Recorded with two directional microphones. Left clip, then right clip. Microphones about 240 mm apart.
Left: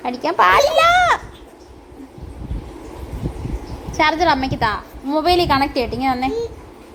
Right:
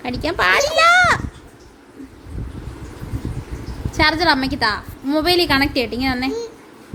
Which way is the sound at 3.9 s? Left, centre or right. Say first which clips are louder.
Even; centre.